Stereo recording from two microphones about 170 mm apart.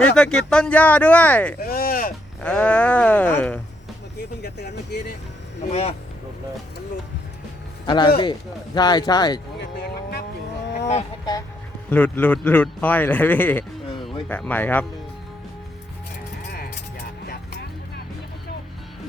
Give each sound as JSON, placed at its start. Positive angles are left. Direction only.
{"t": 0.0, "sound": "a man's voice", "side_deg": 5}
{"t": 1.6, "sound": "a sound", "side_deg": 60}
{"t": 2.4, "sound": "a man's voice", "side_deg": 5}
{"t": 4.4, "sound": "speech", "side_deg": 75}
{"t": 5.6, "sound": "speech", "side_deg": 40}
{"t": 7.9, "sound": "speech", "side_deg": 25}
{"t": 9.6, "sound": "a sound", "side_deg": 70}
{"t": 10.8, "sound": "fowl", "side_deg": 40}
{"t": 11.9, "sound": "a man's voice", "side_deg": 10}